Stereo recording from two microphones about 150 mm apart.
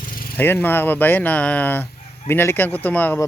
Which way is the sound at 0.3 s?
15° left (ahead or behind).